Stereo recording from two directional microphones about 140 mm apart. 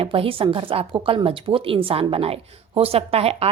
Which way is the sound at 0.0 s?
40° right (ahead or behind).